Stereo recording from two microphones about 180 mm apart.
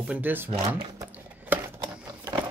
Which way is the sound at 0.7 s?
10° right (ahead or behind).